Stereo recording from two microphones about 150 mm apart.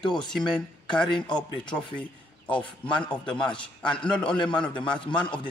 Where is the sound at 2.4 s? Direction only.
35° left (ahead or behind).